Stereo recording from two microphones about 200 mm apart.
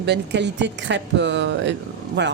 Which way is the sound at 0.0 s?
60° right (ahead or behind).